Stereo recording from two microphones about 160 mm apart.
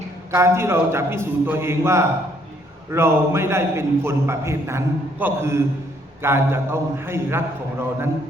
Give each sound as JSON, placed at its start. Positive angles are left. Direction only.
{"t": 0.3, "sound": "a man's voice", "side_deg": -15}